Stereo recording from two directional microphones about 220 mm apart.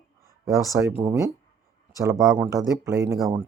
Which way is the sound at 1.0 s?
15° right (ahead or behind).